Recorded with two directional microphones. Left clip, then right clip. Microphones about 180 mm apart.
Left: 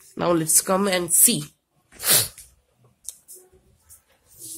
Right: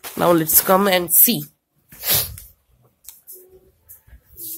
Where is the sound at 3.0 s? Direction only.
10° left (ahead or behind).